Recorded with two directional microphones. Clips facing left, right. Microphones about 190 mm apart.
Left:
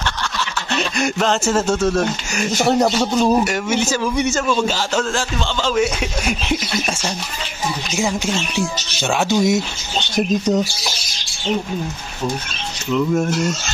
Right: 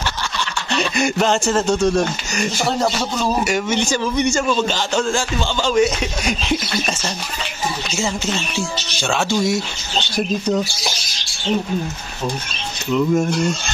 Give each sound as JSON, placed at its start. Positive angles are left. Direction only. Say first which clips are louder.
{"t": 0.7, "sound": "speech", "louder": "right 2 dB", "side_deg": 0}
{"t": 2.8, "sound": "speech", "louder": "left 4 dB", "side_deg": 15}
{"t": 3.4, "sound": "a man's voice", "louder": "even", "side_deg": 5}
{"t": 8.1, "sound": "speech", "louder": "left 2 dB", "side_deg": 15}
{"t": 12.9, "sound": "a man's voice", "louder": "right 1 dB", "side_deg": 0}